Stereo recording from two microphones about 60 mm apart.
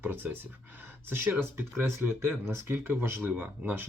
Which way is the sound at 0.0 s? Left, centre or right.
Right.